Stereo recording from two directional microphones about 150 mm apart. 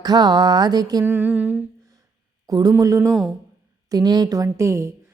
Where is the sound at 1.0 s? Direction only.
10° right (ahead or behind).